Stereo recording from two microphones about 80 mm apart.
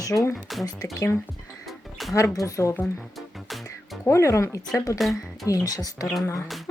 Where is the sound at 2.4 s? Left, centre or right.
Left.